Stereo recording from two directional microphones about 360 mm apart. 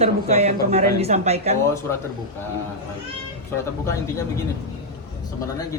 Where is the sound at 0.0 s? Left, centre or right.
Centre.